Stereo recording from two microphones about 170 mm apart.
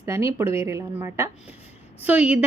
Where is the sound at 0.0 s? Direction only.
15° right (ahead or behind).